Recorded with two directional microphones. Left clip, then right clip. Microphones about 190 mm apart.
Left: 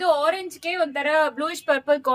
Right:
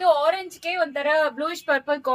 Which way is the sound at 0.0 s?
20° left (ahead or behind).